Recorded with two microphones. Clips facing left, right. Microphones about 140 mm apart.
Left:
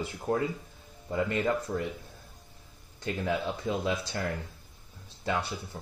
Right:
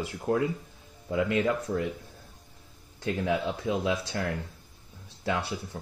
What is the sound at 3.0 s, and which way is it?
Speech, 75° right (ahead or behind).